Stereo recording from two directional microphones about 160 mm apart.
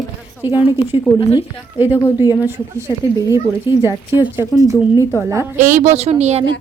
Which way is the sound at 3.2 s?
25° left (ahead or behind).